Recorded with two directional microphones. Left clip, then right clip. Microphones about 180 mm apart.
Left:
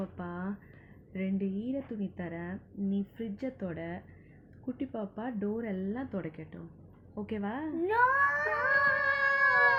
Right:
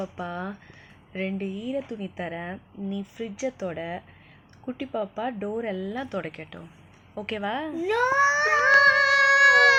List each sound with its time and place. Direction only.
0.2 s a woman's voice: 15° right (ahead or behind)
7.3 s baby cry: 10° right (ahead or behind)